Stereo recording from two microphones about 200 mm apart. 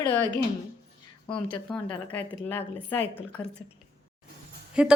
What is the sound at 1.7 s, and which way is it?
Speech, 25° left (ahead or behind).